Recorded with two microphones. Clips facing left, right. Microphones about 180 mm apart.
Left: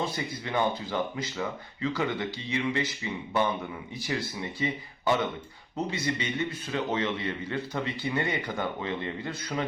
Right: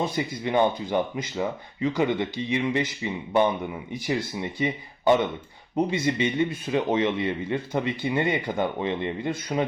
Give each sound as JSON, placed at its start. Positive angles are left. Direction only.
{"t": 0.0, "sound": "speech", "side_deg": -20}